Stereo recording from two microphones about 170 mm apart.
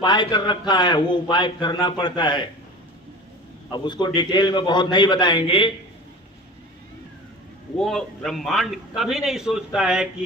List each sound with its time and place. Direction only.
0.0 s a man's voice: 25° left (ahead or behind)
3.7 s a man's voice: 25° left (ahead or behind)
7.8 s a man's voice: centre (ahead or behind)